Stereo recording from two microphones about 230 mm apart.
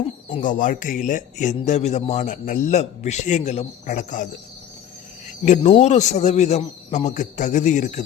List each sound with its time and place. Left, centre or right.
0.4 s a man's voice: left
5.4 s a man's voice: left